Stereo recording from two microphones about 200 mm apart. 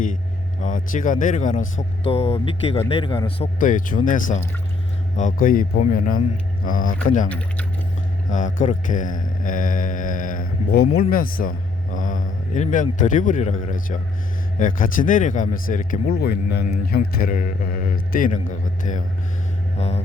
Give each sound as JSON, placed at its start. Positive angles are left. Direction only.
{"t": 0.6, "sound": "speech", "side_deg": 40}
{"t": 2.0, "sound": "speech", "side_deg": 30}
{"t": 3.6, "sound": "a man's voice", "side_deg": 40}
{"t": 7.3, "sound": "speech", "side_deg": 5}
{"t": 8.3, "sound": "mantra", "side_deg": 40}
{"t": 11.1, "sound": "a man's voice", "side_deg": 45}
{"t": 19.7, "sound": "music", "side_deg": 35}